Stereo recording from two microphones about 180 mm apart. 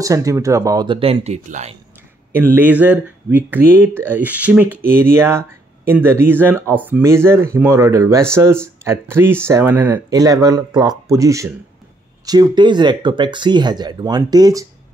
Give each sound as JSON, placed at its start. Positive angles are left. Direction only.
{"t": 0.0, "sound": "speech", "side_deg": -20}
{"t": 2.5, "sound": "speech", "side_deg": -10}